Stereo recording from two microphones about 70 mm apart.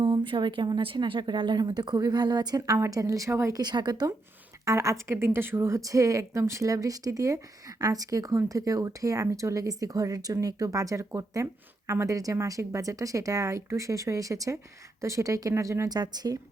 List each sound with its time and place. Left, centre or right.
0.0 s a woman's voice: right
2.6 s speech: right
2.9 s speech: right
3.5 s speech: right
4.6 s speech: right
15.9 s speech: right